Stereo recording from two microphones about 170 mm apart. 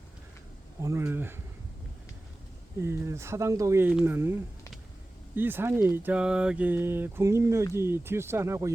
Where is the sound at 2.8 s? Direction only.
15° right (ahead or behind).